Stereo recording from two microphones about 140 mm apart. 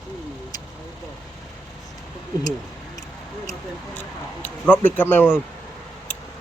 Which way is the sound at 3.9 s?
15° left (ahead or behind).